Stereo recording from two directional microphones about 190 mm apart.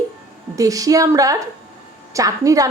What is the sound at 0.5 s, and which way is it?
A woman's voice, 20° right (ahead or behind).